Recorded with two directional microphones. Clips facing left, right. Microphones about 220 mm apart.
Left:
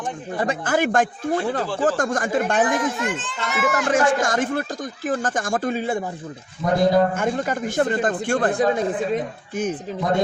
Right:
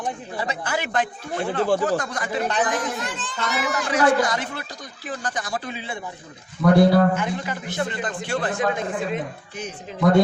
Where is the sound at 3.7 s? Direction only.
50° left (ahead or behind).